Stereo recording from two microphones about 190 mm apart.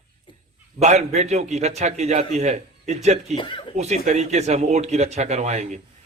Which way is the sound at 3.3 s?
25° left (ahead or behind).